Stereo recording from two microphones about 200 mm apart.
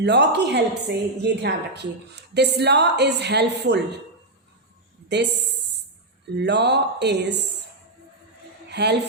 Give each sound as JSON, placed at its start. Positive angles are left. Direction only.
{"t": 0.0, "sound": "a woman's voice", "side_deg": -60}
{"t": 5.0, "sound": "a woman's voice", "side_deg": -60}
{"t": 6.3, "sound": "a woman's voice", "side_deg": -60}
{"t": 8.7, "sound": "a woman's voice", "side_deg": -55}